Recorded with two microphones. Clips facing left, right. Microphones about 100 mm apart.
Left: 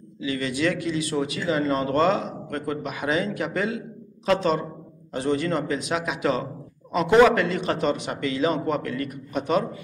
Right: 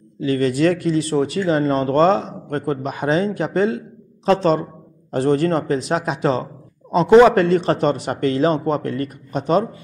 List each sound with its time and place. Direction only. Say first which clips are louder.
0.2 s speech: right 8 dB; 45° right (ahead or behind)